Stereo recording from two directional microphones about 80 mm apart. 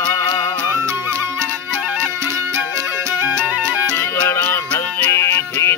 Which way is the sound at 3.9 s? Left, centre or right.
Left.